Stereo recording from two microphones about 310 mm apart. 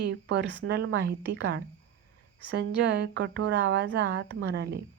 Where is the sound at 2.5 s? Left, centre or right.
Right.